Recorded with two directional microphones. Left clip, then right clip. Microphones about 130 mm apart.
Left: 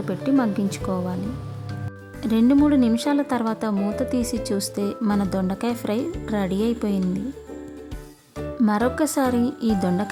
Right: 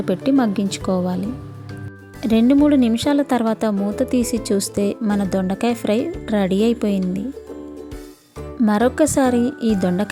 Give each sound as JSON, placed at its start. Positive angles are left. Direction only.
{"t": 0.0, "sound": "a woman's voice", "side_deg": -35}
{"t": 2.2, "sound": "a woman's voice", "side_deg": -30}
{"t": 8.6, "sound": "a woman's voice", "side_deg": -30}